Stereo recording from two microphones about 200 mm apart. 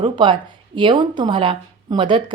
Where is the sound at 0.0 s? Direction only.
25° right (ahead or behind).